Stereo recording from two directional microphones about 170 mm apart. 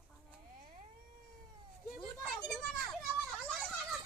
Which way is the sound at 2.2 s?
Centre (ahead or behind).